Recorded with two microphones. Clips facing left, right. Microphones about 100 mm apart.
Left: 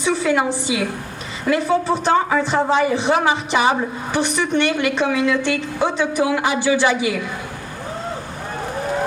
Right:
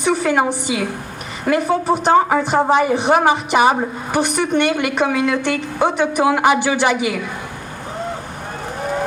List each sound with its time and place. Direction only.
0.0 s a woman's voice: 55° right (ahead or behind)
1.5 s a woman's voice: 50° right (ahead or behind)